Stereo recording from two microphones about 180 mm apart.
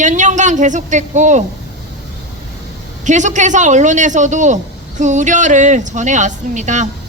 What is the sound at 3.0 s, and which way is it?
A woman's voice, 40° right (ahead or behind).